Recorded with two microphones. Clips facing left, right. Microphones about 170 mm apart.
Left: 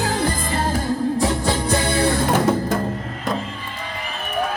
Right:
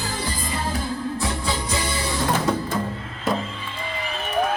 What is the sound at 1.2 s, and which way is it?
Music, 55° left (ahead or behind).